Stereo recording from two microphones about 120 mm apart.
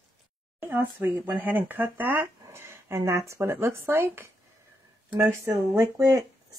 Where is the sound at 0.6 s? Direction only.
15° right (ahead or behind).